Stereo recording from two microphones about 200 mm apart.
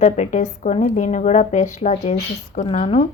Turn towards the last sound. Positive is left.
turn(degrees=35)  # may be behind; listen again after turning